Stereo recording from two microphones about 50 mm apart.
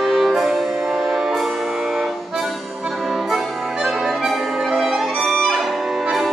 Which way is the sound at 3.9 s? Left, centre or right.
Centre.